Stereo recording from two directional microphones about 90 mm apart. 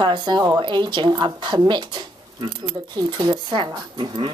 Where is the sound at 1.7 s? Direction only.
55° right (ahead or behind).